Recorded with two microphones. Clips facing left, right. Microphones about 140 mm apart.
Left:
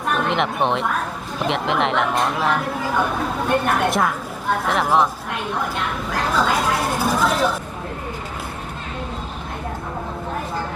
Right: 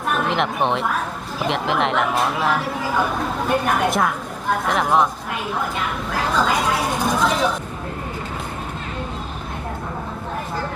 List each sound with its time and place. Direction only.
0.1 s speech: centre (ahead or behind)